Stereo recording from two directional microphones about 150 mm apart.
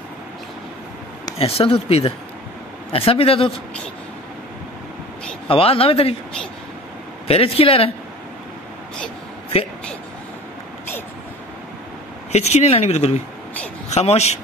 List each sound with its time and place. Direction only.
1.4 s speech: 40° left (ahead or behind)
5.5 s speech: 40° left (ahead or behind)
7.2 s speech: 40° left (ahead or behind)
12.3 s a man's voice: 45° left (ahead or behind)